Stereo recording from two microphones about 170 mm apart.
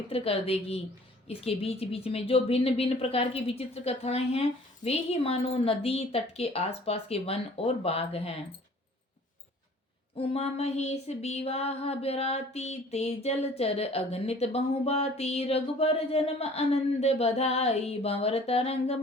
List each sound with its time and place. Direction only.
0.1 s a woman's voice: 35° left (ahead or behind)
10.2 s a woman's voice: 35° left (ahead or behind)